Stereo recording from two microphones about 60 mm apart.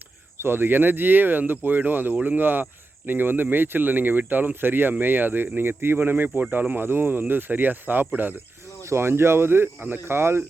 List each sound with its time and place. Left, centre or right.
0.3 s speech: right
8.8 s speech: right